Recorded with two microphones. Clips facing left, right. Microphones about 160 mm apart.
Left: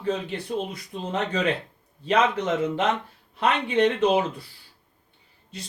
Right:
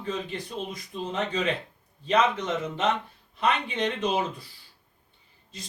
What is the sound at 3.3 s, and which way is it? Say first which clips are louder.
Speech: left 4 dB; 65° left (ahead or behind).